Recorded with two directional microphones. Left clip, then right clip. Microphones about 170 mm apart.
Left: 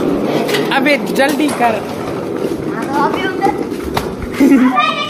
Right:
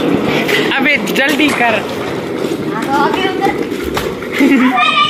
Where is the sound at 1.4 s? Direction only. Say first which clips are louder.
Right 2 dB; centre (ahead or behind).